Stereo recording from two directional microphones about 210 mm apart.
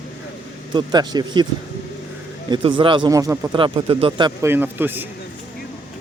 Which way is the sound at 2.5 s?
25° right (ahead or behind).